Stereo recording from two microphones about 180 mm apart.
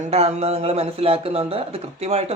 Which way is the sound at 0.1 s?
35° right (ahead or behind).